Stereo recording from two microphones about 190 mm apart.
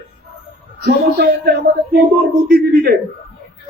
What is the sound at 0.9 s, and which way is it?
Speech, 55° right (ahead or behind).